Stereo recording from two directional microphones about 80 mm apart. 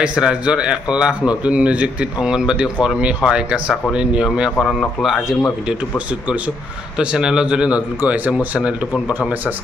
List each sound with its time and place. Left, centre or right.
0.0 s speech: centre
4.6 s a man's voice: centre
5.7 s speech: centre